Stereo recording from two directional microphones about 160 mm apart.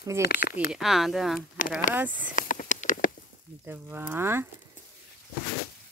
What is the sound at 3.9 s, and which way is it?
Speech, 15° right (ahead or behind).